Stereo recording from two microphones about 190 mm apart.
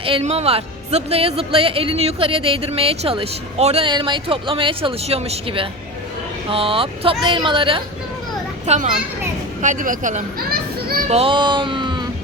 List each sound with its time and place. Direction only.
0.0 s a woman's voice: 30° right (ahead or behind)
8.6 s a child's voice: 35° right (ahead or behind)
11.1 s music: 30° right (ahead or behind)